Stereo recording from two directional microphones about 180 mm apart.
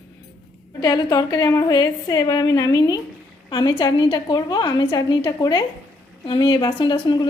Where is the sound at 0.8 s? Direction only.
20° left (ahead or behind).